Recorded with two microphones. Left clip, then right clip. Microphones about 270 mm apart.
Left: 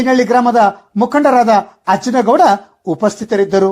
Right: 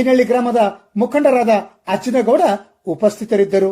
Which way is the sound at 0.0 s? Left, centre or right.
Left.